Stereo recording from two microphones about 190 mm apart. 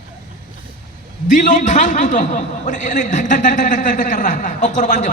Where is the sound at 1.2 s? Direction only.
40° left (ahead or behind).